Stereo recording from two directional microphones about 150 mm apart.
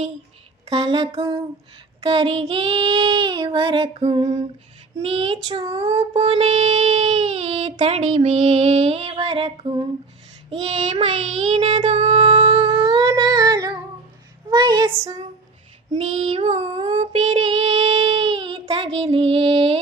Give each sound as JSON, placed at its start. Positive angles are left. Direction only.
{"t": 0.7, "sound": "child singing", "side_deg": -35}
{"t": 6.0, "sound": "child singing", "side_deg": -40}
{"t": 12.1, "sound": "child singing", "side_deg": -35}
{"t": 12.5, "sound": "humming", "side_deg": -35}
{"t": 14.5, "sound": "child singing", "side_deg": -30}
{"t": 16.0, "sound": "child singing", "side_deg": -50}
{"t": 17.0, "sound": "child singing", "side_deg": -45}